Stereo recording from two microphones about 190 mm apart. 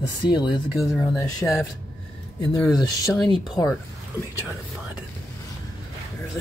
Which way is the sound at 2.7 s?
20° left (ahead or behind).